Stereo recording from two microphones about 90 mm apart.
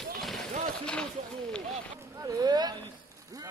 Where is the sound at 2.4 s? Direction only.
50° right (ahead or behind).